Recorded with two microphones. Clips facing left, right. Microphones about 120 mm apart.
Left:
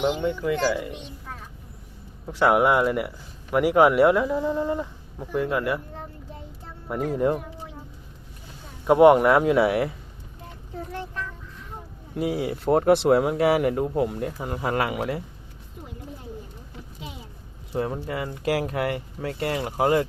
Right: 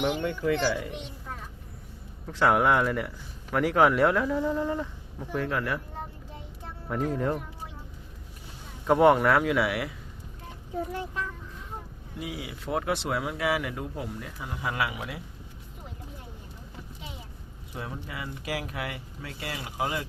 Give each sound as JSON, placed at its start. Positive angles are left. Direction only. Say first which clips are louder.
{"t": 0.2, "sound": "speech", "louder": "left 3 dB", "side_deg": 15}
{"t": 2.2, "sound": "speech", "louder": "left 3 dB", "side_deg": 15}
{"t": 6.8, "sound": "speech", "louder": "left 4 dB", "side_deg": 15}
{"t": 8.9, "sound": "speech", "louder": "left 5 dB", "side_deg": 15}
{"t": 9.4, "sound": "speech", "louder": "left 6 dB", "side_deg": 30}
{"t": 12.1, "sound": "speech", "louder": "left 11 dB", "side_deg": 50}
{"t": 14.3, "sound": "speech", "louder": "left 3 dB", "side_deg": 45}
{"t": 17.7, "sound": "speech", "louder": "left 10 dB", "side_deg": 45}